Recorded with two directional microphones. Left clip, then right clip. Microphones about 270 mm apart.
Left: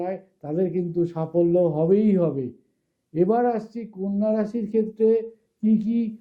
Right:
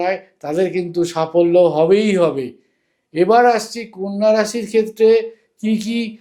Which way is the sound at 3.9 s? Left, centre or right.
Right.